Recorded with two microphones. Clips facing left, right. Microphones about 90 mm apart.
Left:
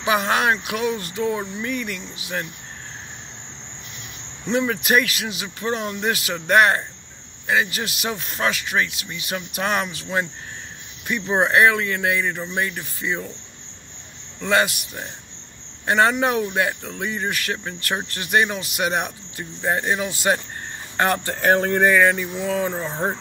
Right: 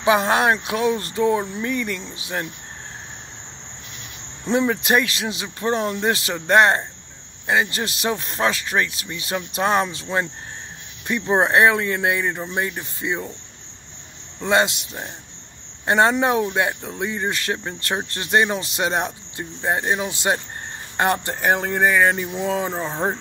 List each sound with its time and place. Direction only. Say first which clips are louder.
0.0 s speech: right 3 dB; 25° right (ahead or behind)
4.5 s speech: right 1 dB; 25° right (ahead or behind)
14.4 s speech: right 1 dB; 25° right (ahead or behind); by 22.0 s 5° right (ahead or behind)
22.0 s speech: even; 25° right (ahead or behind)